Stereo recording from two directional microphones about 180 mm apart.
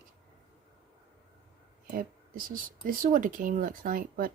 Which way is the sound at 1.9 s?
50° right (ahead or behind).